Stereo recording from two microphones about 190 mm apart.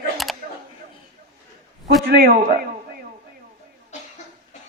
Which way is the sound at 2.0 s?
50° right (ahead or behind).